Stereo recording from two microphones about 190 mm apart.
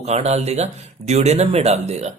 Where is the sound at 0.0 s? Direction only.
35° right (ahead or behind).